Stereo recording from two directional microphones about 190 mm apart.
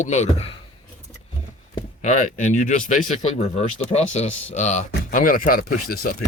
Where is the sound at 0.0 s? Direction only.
35° left (ahead or behind).